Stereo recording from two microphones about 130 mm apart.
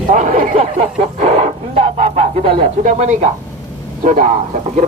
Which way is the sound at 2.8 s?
70° right (ahead or behind).